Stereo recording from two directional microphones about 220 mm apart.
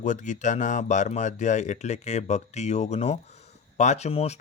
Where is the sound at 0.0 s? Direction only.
35° left (ahead or behind).